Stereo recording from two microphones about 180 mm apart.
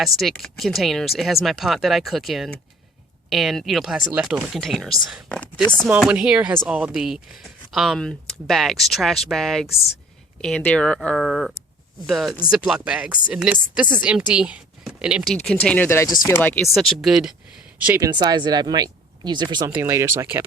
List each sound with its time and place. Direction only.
0.0 s speech: centre (ahead or behind)
16.7 s speech: centre (ahead or behind)
18.2 s speech: 25° right (ahead or behind)